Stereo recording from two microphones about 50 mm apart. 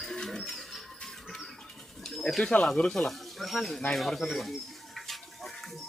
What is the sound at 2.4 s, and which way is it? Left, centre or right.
Speech, centre.